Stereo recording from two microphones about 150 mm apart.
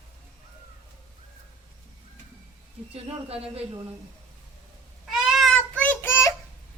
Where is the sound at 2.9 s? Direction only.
40° right (ahead or behind).